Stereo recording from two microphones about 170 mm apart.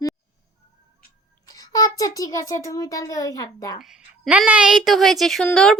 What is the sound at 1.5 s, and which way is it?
A child's voice, 20° left (ahead or behind).